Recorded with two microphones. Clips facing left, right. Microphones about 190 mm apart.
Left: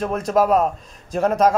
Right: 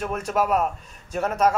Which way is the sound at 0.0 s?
35° left (ahead or behind).